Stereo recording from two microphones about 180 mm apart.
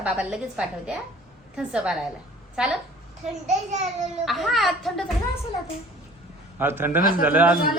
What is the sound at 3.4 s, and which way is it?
Speech, 40° right (ahead or behind).